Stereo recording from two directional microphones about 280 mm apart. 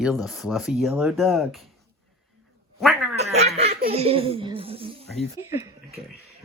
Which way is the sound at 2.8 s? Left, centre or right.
Centre.